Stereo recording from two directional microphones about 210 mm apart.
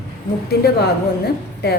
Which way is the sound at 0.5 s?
50° left (ahead or behind).